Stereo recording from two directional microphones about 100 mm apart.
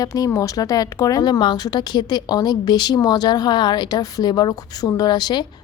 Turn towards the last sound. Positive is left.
turn(degrees=45)  # may be behind; listen again after turning